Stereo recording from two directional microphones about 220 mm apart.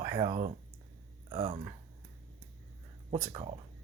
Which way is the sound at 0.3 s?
35° right (ahead or behind).